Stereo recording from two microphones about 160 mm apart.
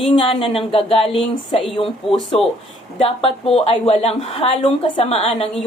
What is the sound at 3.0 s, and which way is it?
A woman's voice, 35° left (ahead or behind).